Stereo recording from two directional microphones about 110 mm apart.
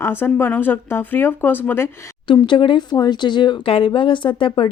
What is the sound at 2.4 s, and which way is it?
Speech, 45° left (ahead or behind).